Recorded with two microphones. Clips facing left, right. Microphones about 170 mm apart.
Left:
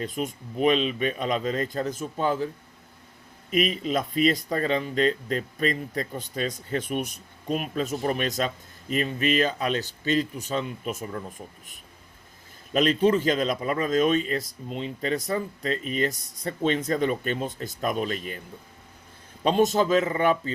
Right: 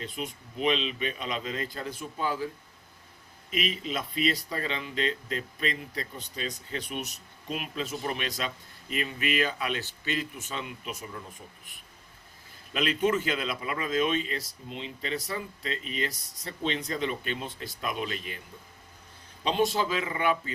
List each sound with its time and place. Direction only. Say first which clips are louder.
0.0 s speech: left 7 dB; 45° left (ahead or behind)
3.5 s speech: left 7 dB; 45° left (ahead or behind)
12.7 s speech: left 6 dB; 40° left (ahead or behind)
19.5 s speech: left 6 dB; 45° left (ahead or behind)